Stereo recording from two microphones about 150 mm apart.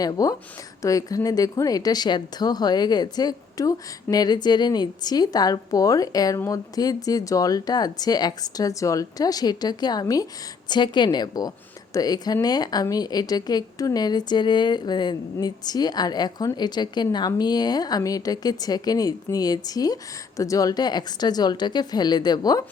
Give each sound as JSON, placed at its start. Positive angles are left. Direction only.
{"t": 0.0, "sound": "speech", "side_deg": 25}